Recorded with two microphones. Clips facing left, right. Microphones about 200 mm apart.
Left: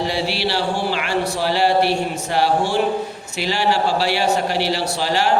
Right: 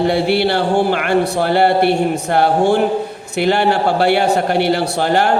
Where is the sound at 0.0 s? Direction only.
55° right (ahead or behind).